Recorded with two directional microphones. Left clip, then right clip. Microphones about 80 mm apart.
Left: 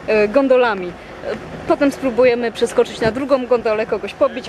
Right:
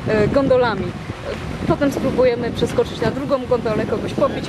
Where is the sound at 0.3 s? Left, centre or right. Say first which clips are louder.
Left 1 dB; left.